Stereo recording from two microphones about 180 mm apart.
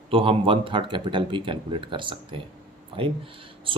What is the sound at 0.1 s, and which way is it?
Speech, 30° right (ahead or behind).